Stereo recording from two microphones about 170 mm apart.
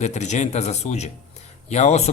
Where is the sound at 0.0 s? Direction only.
45° left (ahead or behind).